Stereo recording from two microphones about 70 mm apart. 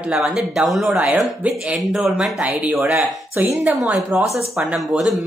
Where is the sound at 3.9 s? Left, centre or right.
Right.